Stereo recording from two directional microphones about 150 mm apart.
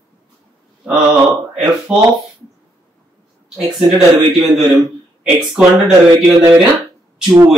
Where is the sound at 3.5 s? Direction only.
5° right (ahead or behind).